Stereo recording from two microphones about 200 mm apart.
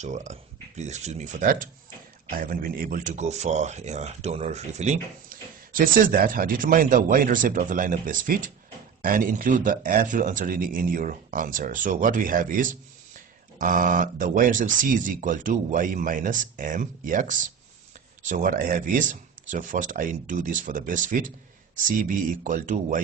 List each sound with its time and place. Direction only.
0.0 s speech: 35° right (ahead or behind)